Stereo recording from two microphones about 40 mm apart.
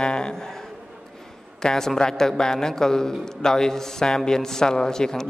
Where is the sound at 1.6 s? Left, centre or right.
Centre.